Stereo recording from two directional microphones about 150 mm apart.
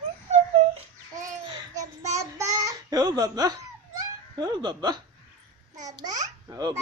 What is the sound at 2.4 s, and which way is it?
Babbling, 20° right (ahead or behind).